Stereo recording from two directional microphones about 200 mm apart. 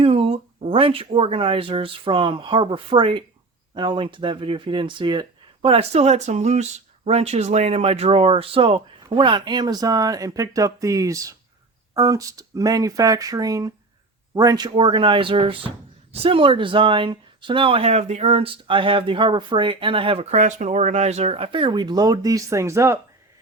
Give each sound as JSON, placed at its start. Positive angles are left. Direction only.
{"t": 0.0, "sound": "speech", "side_deg": -30}